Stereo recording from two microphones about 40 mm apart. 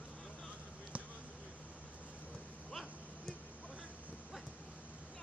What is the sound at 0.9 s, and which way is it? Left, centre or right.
Basketball bounce, right.